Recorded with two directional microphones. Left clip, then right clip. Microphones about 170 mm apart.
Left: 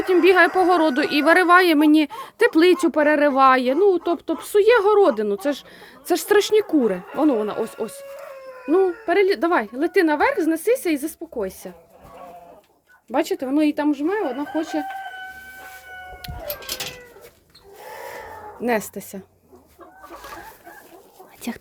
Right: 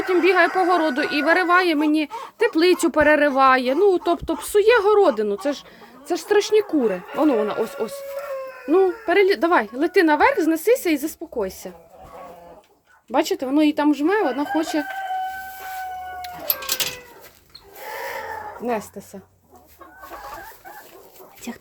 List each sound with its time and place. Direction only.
0.0 s a woman's voice: 20° left (ahead or behind)
6.1 s speech: 30° left (ahead or behind); by 11.7 s 5° left (ahead or behind)
13.1 s speech: 5° left (ahead or behind)
18.6 s speech: 55° left (ahead or behind)
21.4 s a woman's voice: 30° left (ahead or behind)